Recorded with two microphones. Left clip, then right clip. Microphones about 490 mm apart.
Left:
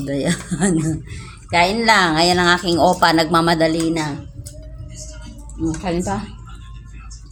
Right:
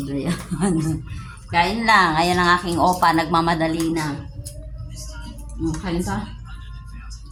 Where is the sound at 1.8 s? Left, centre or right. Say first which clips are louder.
Right 1 dB; right.